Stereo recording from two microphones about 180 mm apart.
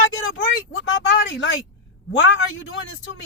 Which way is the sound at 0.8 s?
90° left.